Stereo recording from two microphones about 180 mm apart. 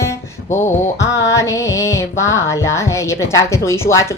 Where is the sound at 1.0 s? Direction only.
15° left (ahead or behind).